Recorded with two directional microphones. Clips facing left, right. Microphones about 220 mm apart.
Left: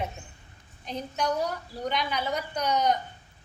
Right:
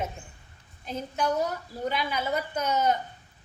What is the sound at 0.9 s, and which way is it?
A woman's voice, 5° right (ahead or behind).